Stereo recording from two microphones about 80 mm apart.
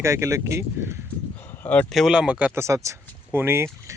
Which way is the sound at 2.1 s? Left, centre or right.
Centre.